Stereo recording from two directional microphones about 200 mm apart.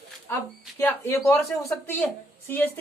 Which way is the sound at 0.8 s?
15° left (ahead or behind).